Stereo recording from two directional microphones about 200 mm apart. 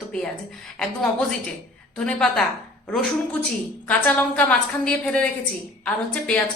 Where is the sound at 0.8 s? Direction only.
5° left (ahead or behind).